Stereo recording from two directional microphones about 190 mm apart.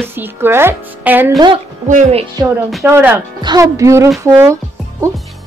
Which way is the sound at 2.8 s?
10° right (ahead or behind).